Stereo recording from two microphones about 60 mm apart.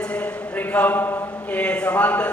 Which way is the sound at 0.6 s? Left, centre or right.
Left.